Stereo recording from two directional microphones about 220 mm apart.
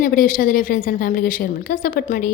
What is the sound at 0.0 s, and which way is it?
A woman's voice, 40° left (ahead or behind).